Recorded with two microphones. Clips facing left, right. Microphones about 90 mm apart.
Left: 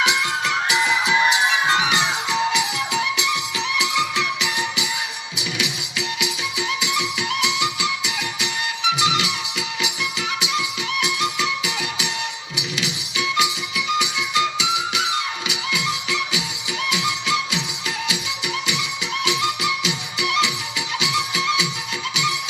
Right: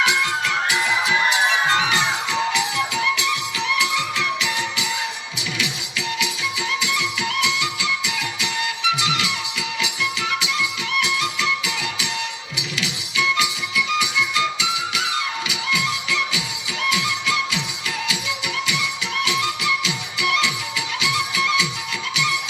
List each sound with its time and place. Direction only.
0.0 s music: 20° left (ahead or behind)